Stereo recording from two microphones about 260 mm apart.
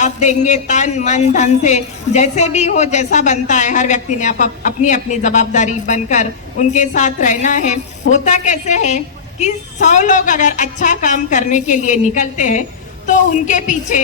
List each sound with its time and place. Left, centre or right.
0.0 s speech: left